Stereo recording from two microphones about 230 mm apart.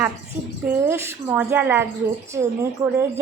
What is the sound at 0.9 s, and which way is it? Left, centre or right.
Speech, centre.